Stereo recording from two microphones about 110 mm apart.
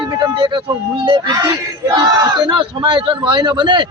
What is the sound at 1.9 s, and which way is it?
Speech, 45° right (ahead or behind).